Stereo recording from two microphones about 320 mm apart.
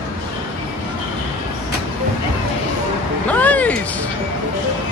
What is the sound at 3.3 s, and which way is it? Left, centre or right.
Music, centre.